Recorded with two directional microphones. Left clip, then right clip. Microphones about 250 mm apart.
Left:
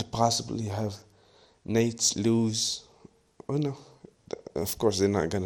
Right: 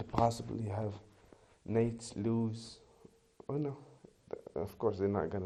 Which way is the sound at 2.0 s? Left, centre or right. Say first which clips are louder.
Left 11 dB; left.